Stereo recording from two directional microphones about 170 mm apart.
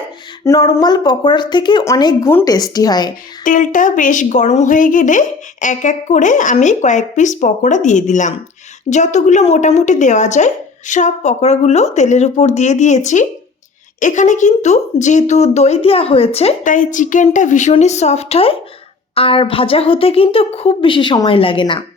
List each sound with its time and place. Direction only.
0.4 s speech: 20° left (ahead or behind)
3.4 s a woman's voice: 50° left (ahead or behind)
16.6 s a woman's voice: 50° left (ahead or behind); by 21.8 s 30° left (ahead or behind)